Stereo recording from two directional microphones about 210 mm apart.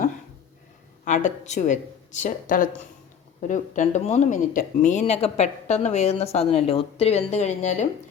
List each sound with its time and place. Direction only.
1.0 s speech: 35° left (ahead or behind)